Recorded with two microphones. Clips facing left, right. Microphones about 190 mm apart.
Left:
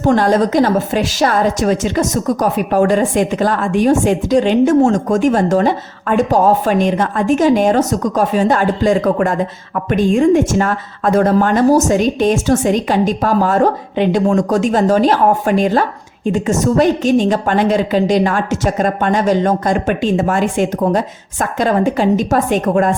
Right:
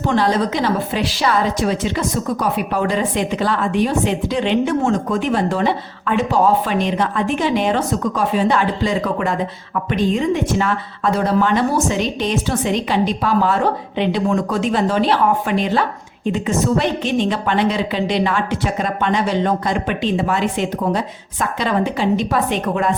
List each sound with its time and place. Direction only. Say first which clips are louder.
0.0 s a woman's voice: left 5 dB; 45° left (ahead or behind)